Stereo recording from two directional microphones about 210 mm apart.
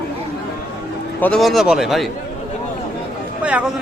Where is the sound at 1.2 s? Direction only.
5° left (ahead or behind).